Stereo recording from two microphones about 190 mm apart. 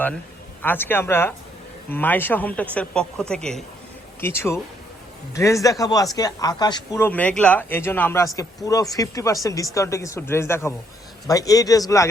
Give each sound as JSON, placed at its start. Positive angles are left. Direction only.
{"t": 0.6, "sound": "speech", "side_deg": 10}